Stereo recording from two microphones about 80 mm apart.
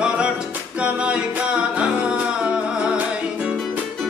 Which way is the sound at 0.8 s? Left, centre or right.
Centre.